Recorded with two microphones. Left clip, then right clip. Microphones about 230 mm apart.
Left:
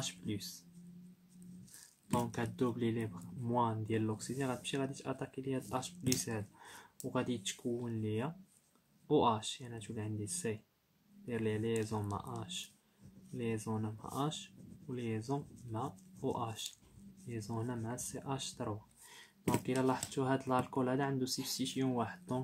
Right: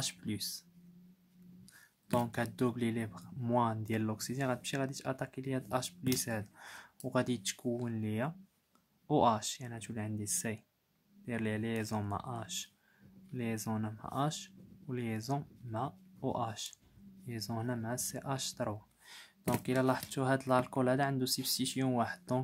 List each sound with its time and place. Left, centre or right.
0.0 s speech: right
2.1 s speech: right